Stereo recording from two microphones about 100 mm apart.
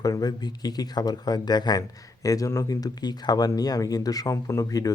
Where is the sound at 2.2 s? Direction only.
35° left (ahead or behind).